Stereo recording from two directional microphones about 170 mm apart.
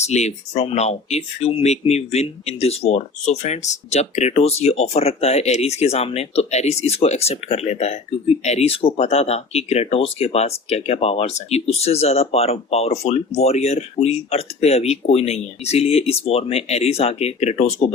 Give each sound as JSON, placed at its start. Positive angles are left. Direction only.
{"t": 0.0, "sound": "speech", "side_deg": 40}